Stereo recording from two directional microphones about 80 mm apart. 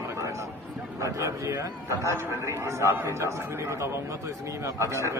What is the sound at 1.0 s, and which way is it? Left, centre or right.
A man's voice, right.